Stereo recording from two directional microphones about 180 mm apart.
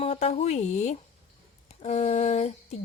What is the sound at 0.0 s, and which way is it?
A woman's voice, 35° left (ahead or behind).